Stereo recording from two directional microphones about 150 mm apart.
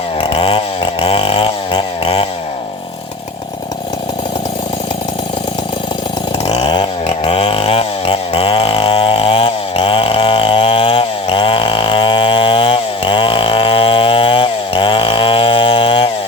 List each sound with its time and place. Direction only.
0.2 s chainsaw: 35° left (ahead or behind)
6.4 s chainsaw: 30° left (ahead or behind)